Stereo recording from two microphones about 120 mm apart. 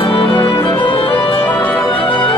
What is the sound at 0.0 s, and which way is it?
Music, 50° left (ahead or behind).